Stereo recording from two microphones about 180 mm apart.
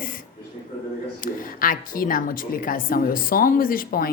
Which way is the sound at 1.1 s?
50° left (ahead or behind).